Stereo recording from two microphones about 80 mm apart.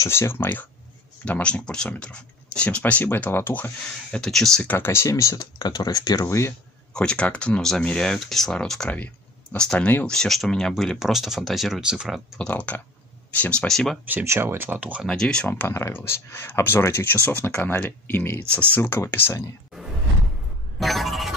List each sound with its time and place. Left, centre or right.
0.0 s speech: left
1.2 s speech: centre
4.2 s speech: centre
4.6 s speech: left
6.9 s speech: centre
8.9 s clicking: left
9.6 s speech: centre
12.4 s speech: centre
14.2 s speech: right; by 15.0 s centre
15.0 s speech: centre
15.7 s speech: left
20.8 s speech: centre